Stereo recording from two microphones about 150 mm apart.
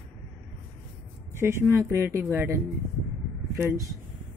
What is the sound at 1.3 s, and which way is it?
Speech, 15° right (ahead or behind).